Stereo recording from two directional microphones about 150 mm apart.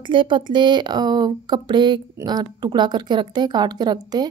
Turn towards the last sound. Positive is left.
turn(degrees=-25)  # may be behind; listen again after turning